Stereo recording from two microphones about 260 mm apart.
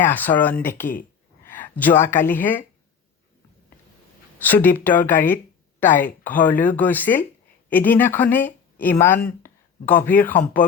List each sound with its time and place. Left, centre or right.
0.0 s a woman's voice: centre
1.5 s a sound: centre
2.2 s a woman's voice: centre
4.4 s a woman's voice: centre
5.9 s speech: left
6.2 s a woman's voice: centre
9.1 s speech: left
9.8 s a woman's voice: centre